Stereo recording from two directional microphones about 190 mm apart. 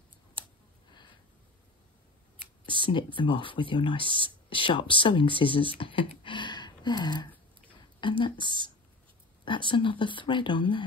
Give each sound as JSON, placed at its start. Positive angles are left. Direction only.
{"t": 0.4, "sound": "clicking", "side_deg": -25}
{"t": 2.6, "sound": "speech", "side_deg": 25}